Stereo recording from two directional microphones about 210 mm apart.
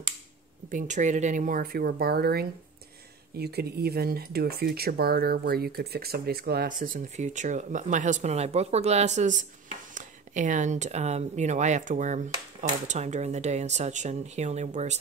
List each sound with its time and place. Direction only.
0.7 s speech: 35° right (ahead or behind)